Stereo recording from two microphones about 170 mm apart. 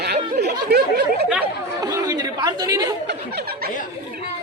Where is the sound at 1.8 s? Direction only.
20° right (ahead or behind).